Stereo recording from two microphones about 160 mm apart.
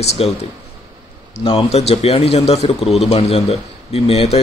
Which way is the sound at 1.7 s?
40° left (ahead or behind).